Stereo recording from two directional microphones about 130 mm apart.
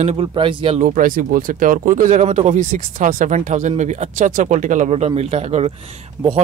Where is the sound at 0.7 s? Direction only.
90° right; by 5.7 s 55° right (ahead or behind).